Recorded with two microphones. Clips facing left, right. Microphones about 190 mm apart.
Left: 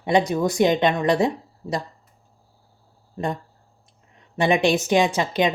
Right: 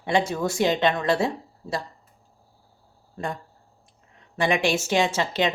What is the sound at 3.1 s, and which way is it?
Speech, 20° left (ahead or behind).